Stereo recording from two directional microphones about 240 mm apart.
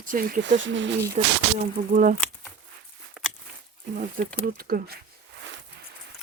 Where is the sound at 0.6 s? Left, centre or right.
Right.